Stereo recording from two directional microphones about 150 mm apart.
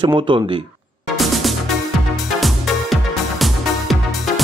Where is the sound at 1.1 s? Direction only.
Centre (ahead or behind).